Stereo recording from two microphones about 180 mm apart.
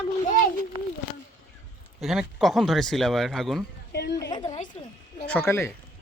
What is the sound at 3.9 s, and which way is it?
Speech, 70° left (ahead or behind).